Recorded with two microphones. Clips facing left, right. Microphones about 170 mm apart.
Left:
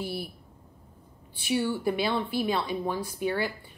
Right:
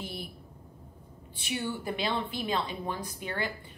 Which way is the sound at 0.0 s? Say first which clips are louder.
Left 6 dB; 5° left (ahead or behind).